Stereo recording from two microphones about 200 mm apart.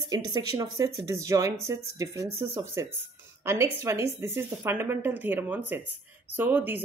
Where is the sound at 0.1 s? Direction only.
20° right (ahead or behind).